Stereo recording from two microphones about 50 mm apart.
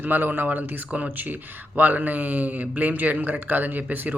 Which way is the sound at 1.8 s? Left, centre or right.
Right.